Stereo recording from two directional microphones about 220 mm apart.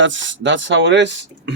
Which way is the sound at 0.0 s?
60° right (ahead or behind).